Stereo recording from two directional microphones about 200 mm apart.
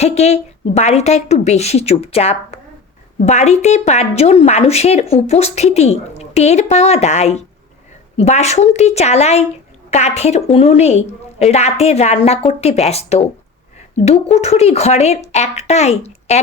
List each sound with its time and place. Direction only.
0.0 s a woman's voice: 30° left (ahead or behind)